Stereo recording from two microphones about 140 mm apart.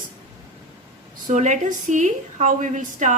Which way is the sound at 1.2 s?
60° right (ahead or behind).